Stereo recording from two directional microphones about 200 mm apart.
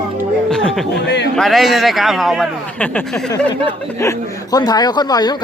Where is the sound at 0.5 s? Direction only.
Centre (ahead or behind).